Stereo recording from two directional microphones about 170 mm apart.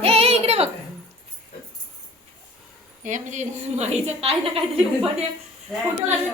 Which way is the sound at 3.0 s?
45° right (ahead or behind).